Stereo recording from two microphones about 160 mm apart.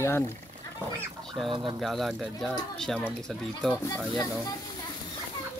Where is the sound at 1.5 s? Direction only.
30° right (ahead or behind).